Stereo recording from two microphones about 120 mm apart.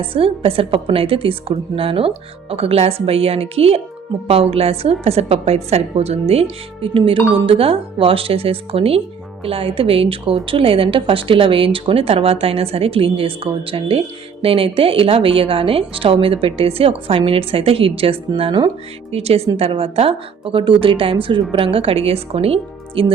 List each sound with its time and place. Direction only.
0.0 s a woman's voice: 50° right (ahead or behind)
19.1 s a woman's voice: 55° right (ahead or behind)